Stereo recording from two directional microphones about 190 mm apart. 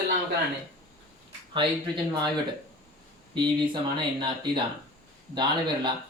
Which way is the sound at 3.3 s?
25° right (ahead or behind).